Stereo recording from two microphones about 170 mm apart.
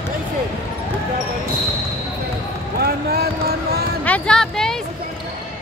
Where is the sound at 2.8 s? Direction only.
65° right (ahead or behind).